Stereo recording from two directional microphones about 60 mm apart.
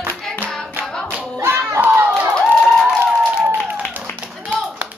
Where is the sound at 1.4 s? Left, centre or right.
Right.